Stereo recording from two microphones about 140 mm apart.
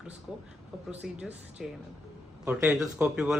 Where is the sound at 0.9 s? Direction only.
10° right (ahead or behind).